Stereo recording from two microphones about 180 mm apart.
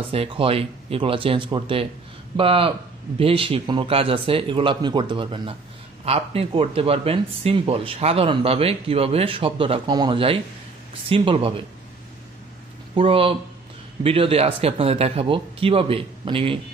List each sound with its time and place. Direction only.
0.1 s speech: 30° right (ahead or behind)
12.9 s speech: 30° right (ahead or behind)